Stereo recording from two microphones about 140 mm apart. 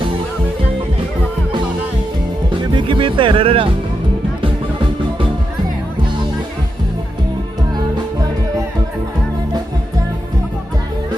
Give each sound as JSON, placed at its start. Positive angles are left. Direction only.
{"t": 2.7, "sound": "music", "side_deg": -35}